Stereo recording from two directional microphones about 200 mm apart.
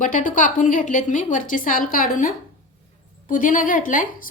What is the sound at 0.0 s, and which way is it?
A woman's voice, 40° left (ahead or behind).